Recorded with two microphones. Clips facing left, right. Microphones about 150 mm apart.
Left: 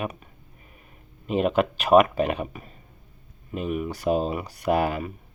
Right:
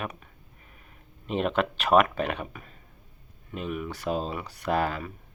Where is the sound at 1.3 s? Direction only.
5° left (ahead or behind).